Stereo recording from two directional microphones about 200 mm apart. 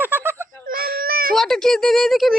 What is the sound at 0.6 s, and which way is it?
Baby cry, 45° right (ahead or behind).